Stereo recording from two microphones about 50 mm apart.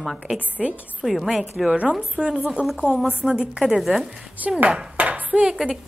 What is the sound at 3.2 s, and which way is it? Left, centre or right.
Speech, centre.